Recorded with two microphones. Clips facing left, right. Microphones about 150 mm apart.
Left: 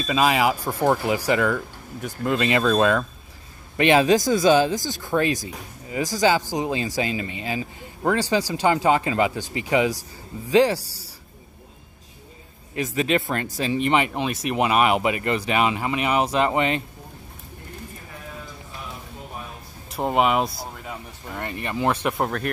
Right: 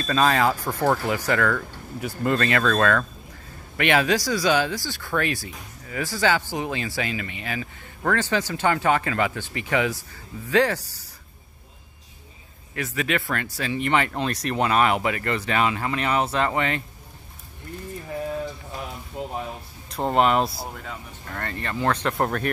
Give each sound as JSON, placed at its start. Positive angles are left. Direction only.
{"t": 0.0, "sound": "speech", "side_deg": 10}
{"t": 2.0, "sound": "speech", "side_deg": -5}
{"t": 2.3, "sound": "speech", "side_deg": 15}
{"t": 12.7, "sound": "speech", "side_deg": 25}
{"t": 20.0, "sound": "speech", "side_deg": 5}
{"t": 22.1, "sound": "speech", "side_deg": 0}